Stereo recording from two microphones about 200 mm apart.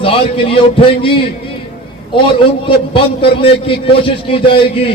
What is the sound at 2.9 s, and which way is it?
A man's voice, 25° left (ahead or behind).